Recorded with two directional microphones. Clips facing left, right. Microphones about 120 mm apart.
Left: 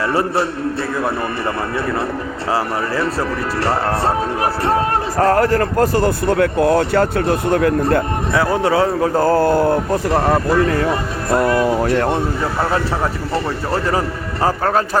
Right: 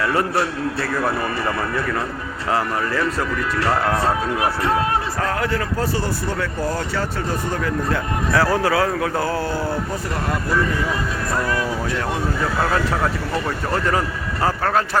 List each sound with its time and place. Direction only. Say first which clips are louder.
0.1 s a man's voice: left 2 dB; 25° left (ahead or behind)
2.5 s a man's voice: left 1 dB; 35° left (ahead or behind); by 8.0 s 55° left (ahead or behind)
8.3 s a man's voice: left 1 dB; 20° left (ahead or behind)
9.2 s a man's voice: left 9 dB; 50° left (ahead or behind); by 10.8 s 70° left (ahead or behind)
11.3 s a man's voice: left 9 dB; 30° left (ahead or behind)
11.5 s a man's voice: left 8 dB; 55° left (ahead or behind)
13.3 s a man's voice: left 3 dB; 30° left (ahead or behind)